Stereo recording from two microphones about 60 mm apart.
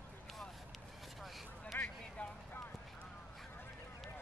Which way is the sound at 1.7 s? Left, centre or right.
Left.